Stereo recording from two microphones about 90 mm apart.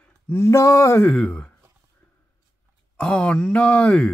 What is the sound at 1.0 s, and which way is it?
Speech, 10° left (ahead or behind).